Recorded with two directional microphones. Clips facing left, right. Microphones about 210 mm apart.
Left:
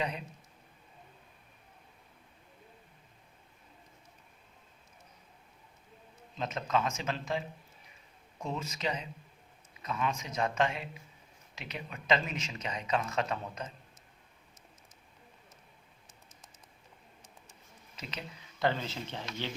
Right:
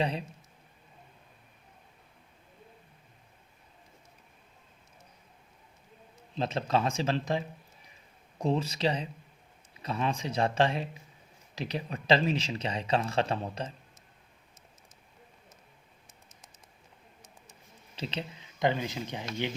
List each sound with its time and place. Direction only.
0.0 s speech: 30° right (ahead or behind)
6.3 s speech: 30° right (ahead or behind)
17.9 s speech: 30° right (ahead or behind)
18.6 s speech: 15° right (ahead or behind)